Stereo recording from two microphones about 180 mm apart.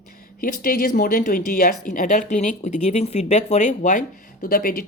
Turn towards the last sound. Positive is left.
turn(degrees=55)  # may be behind; listen again after turning